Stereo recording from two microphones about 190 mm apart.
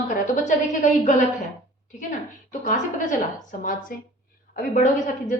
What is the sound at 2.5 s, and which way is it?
A woman's voice, 45° left (ahead or behind).